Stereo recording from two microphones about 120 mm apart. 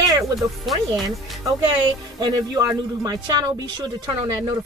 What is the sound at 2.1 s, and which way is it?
Speech, 35° right (ahead or behind).